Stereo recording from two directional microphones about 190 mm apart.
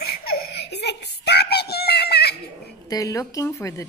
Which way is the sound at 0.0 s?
55° left (ahead or behind).